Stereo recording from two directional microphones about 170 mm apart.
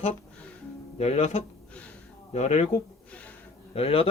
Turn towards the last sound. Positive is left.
turn(degrees=35)  # may be behind; listen again after turning